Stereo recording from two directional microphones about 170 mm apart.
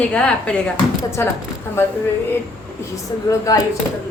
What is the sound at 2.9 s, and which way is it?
Speech, 20° left (ahead or behind).